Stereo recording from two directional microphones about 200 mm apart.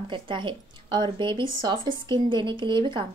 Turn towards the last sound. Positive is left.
turn(degrees=-25)  # may be behind; listen again after turning